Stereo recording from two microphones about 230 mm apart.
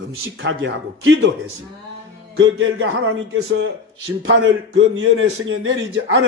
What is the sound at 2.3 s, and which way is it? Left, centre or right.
Speech, right.